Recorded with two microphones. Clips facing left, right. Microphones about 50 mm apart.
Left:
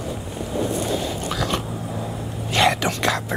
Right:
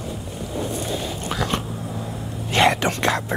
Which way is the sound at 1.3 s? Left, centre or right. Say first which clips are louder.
Right 2 dB; right.